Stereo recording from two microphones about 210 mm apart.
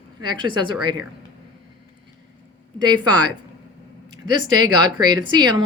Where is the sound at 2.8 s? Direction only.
20° right (ahead or behind).